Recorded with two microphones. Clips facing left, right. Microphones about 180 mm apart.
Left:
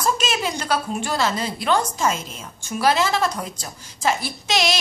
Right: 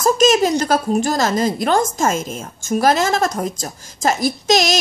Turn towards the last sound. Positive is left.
turn(degrees=-45)  # may be behind; listen again after turning